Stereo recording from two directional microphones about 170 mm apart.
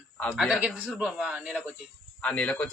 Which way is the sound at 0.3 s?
5° right (ahead or behind).